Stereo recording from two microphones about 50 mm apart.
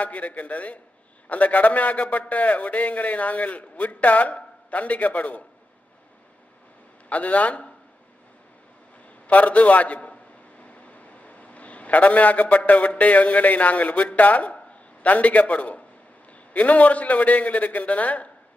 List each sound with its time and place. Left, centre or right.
0.0 s a man's voice: left
7.1 s a man's voice: left
9.3 s a man's voice: left